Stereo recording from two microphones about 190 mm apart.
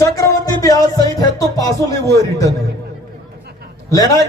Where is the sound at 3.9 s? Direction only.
20° left (ahead or behind).